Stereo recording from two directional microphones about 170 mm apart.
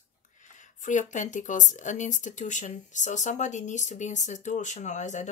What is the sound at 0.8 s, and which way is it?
Speech, 45° left (ahead or behind).